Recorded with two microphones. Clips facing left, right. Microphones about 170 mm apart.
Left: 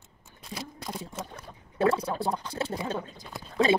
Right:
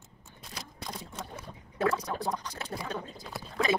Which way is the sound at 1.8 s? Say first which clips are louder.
Left 4 dB; 30° left (ahead or behind).